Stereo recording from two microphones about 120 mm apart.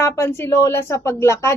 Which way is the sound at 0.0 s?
20° left (ahead or behind).